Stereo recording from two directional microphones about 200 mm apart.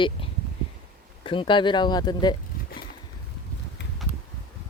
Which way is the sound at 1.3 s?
25° left (ahead or behind).